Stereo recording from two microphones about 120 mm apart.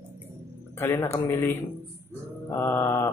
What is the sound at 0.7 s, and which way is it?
A man's voice, 25° left (ahead or behind).